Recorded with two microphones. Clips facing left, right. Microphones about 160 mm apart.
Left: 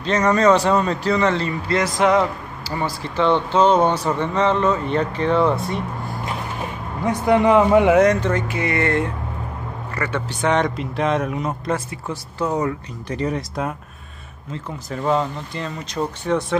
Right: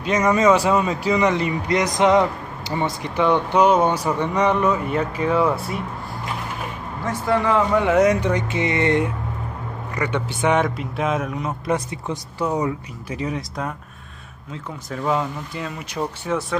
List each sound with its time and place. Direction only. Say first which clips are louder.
0.0 s speech: left 1 dB; 10° right (ahead or behind)
7.1 s a man's voice: left 5 dB; 20° left (ahead or behind)
8.1 s speech: even; 15° right (ahead or behind)
11.6 s speech: right 1 dB; 20° right (ahead or behind)
13.2 s speech: left 3 dB; centre (ahead or behind)